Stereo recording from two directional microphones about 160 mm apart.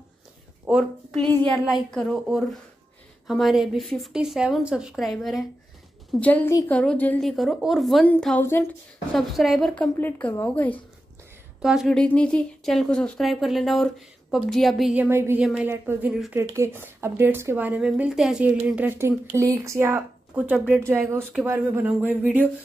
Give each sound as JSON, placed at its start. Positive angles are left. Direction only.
{"t": 0.7, "sound": "a woman's voice", "side_deg": -5}
{"t": 3.3, "sound": "a woman's voice", "side_deg": 0}
{"t": 9.9, "sound": "a woman's voice", "side_deg": 10}
{"t": 11.6, "sound": "speech", "side_deg": -5}
{"t": 15.0, "sound": "speech", "side_deg": -15}
{"t": 15.4, "sound": "speech", "side_deg": -5}
{"t": 16.3, "sound": "speech", "side_deg": -15}